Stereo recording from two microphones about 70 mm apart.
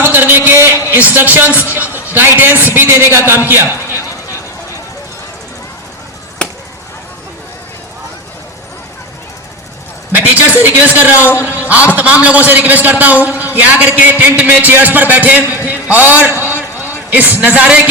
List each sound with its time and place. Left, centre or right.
0.0 s a sound: right
0.7 s a sound: left
0.9 s a man's voice: right
6.4 s chop: centre
10.1 s a man's voice: right
11.2 s a man's voice: left
11.4 s a man's voice: right
16.4 s a sound: right
17.1 s a man's voice: right